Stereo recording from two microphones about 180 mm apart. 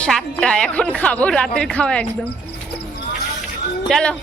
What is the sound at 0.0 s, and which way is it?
Speech, 5° left (ahead or behind).